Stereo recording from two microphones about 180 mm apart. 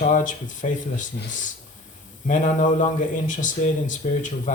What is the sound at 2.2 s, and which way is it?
Speech, 45° left (ahead or behind).